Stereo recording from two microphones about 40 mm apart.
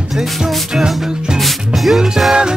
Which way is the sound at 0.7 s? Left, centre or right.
Centre.